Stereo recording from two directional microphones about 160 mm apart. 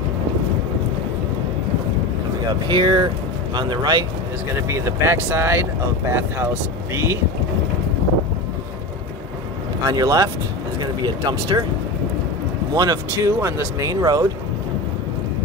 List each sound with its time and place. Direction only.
2.7 s speech: 25° right (ahead or behind)
9.8 s speech: 25° right (ahead or behind)
12.7 s speech: 25° right (ahead or behind)